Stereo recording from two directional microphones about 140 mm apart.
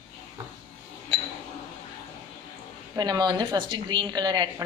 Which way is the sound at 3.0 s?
30° right (ahead or behind).